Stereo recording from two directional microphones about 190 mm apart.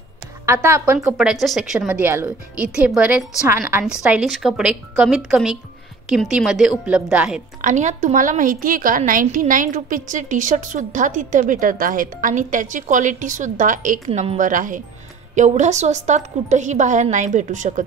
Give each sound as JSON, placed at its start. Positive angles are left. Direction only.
{"t": 0.5, "sound": "speech", "side_deg": -15}
{"t": 1.1, "sound": "a woman's voice", "side_deg": 0}
{"t": 7.6, "sound": "a woman's voice", "side_deg": -40}